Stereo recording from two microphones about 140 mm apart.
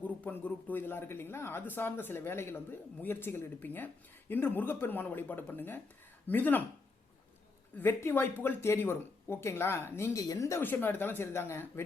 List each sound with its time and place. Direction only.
0.0 s speech: 10° left (ahead or behind)
7.8 s speech: 15° left (ahead or behind)